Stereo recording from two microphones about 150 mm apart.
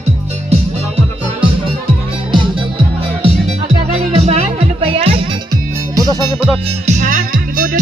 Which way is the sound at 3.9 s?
45° right (ahead or behind).